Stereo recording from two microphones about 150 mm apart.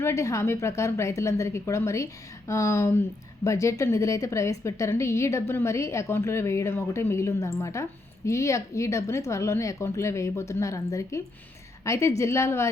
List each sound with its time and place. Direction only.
0.0 s speech: 20° left (ahead or behind)